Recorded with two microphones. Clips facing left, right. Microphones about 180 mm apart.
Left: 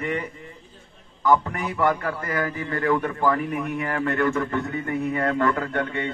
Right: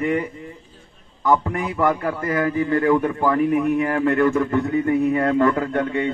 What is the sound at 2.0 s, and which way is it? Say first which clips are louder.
A man's voice: right 5 dB; 25° right (ahead or behind).